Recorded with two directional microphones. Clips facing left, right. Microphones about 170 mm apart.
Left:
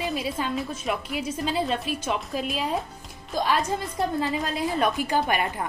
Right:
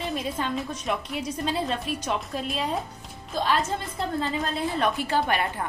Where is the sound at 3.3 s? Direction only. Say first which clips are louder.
Left 1 dB; 15° left (ahead or behind).